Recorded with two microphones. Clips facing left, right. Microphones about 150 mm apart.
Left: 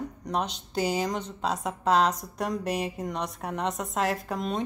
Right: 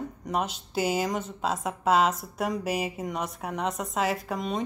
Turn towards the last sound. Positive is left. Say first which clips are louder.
# even
turn(degrees=0)  # may be behind; listen again after turning